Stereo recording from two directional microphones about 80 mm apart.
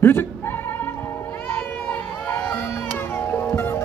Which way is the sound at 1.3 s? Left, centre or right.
Centre.